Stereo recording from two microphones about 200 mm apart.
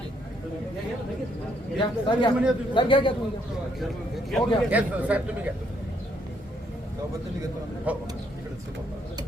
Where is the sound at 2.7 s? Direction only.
25° left (ahead or behind).